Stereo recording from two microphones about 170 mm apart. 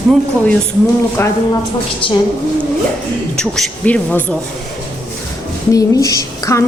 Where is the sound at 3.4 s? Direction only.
5° left (ahead or behind).